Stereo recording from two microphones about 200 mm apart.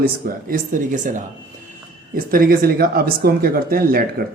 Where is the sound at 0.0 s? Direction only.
45° right (ahead or behind).